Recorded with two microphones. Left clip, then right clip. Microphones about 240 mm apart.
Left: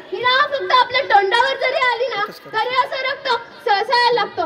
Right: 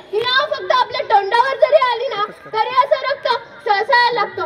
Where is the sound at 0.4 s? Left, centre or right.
Left.